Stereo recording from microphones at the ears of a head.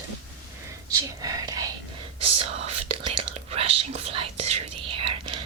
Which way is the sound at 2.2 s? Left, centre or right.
Right.